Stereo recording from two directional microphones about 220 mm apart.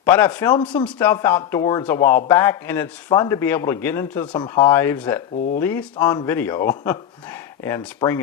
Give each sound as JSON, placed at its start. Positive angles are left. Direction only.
{"t": 0.0, "sound": "speech", "side_deg": 10}